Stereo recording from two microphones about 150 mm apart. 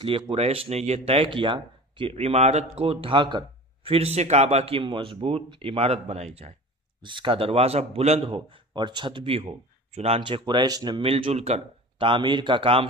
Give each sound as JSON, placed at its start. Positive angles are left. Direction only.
{"t": 0.0, "sound": "speech", "side_deg": -40}
{"t": 7.0, "sound": "speech", "side_deg": -35}
{"t": 8.3, "sound": "speech", "side_deg": -30}
{"t": 11.1, "sound": "speech", "side_deg": -40}